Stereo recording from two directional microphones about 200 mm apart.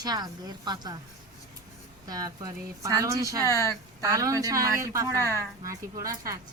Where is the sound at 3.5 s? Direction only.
15° left (ahead or behind).